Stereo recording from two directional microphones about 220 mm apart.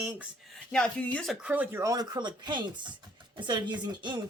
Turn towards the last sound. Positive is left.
turn(degrees=-20)  # may be behind; listen again after turning